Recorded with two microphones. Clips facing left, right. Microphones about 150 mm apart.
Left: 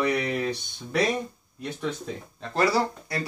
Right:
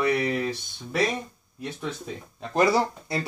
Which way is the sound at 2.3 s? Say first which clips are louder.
Right 2 dB; 20° right (ahead or behind).